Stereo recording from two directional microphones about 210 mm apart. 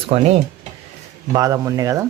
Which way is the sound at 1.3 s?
15° right (ahead or behind).